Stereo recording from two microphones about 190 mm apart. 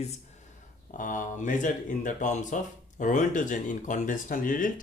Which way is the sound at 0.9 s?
45° left (ahead or behind).